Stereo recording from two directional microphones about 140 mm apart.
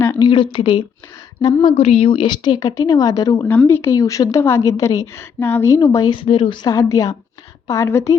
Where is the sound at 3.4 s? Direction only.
15° left (ahead or behind); by 6.7 s 35° left (ahead or behind).